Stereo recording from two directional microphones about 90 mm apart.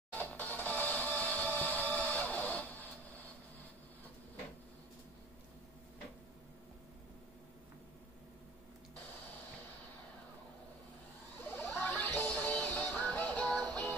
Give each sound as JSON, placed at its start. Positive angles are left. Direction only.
{"t": 0.1, "sound": "music", "side_deg": 15}
{"t": 11.5, "sound": "a sound", "side_deg": 20}
{"t": 12.2, "sound": "music", "side_deg": 20}